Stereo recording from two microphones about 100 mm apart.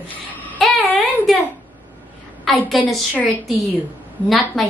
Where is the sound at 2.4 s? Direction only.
Centre (ahead or behind).